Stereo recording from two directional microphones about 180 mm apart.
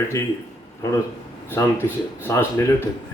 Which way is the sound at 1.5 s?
15° left (ahead or behind).